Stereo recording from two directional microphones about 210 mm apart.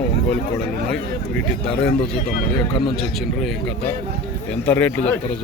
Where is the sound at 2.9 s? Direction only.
Centre (ahead or behind).